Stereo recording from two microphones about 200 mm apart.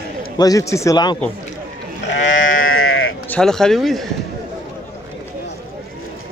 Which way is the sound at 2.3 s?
80° left.